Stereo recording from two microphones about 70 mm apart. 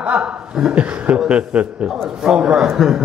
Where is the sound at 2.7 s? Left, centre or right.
Centre.